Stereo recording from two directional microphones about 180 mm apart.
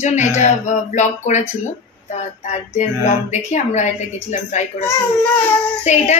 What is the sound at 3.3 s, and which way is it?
Speech, 40° left (ahead or behind).